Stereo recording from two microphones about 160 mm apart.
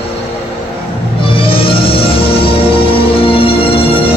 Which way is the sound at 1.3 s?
35° left (ahead or behind).